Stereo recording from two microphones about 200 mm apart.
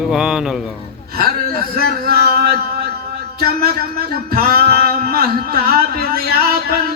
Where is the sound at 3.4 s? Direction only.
50° right (ahead or behind).